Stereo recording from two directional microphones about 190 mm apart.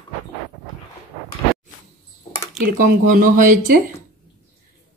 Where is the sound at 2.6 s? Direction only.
45° right (ahead or behind).